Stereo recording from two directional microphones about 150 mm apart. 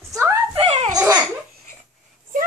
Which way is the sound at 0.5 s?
45° right (ahead or behind).